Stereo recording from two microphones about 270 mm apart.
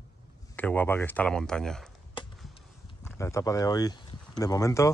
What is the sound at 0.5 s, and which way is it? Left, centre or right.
Speech, centre.